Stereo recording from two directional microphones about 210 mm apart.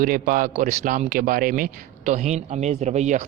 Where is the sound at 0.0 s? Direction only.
40° right (ahead or behind).